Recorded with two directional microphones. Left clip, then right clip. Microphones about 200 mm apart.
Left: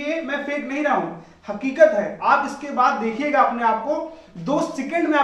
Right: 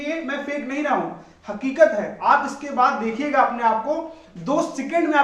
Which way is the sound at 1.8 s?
Centre (ahead or behind).